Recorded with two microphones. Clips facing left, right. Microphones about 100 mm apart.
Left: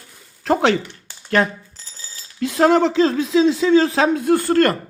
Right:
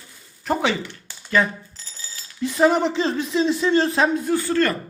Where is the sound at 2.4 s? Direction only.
90° left; by 4.7 s 55° left (ahead or behind).